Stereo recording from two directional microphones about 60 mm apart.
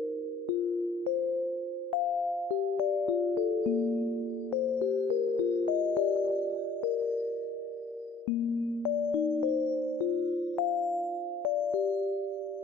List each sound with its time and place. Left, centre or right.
2.7 s music: centre
3.8 s music: left
5.9 s music: left
10.8 s music: centre